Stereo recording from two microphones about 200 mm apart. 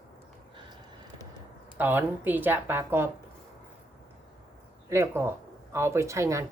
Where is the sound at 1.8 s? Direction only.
10° right (ahead or behind).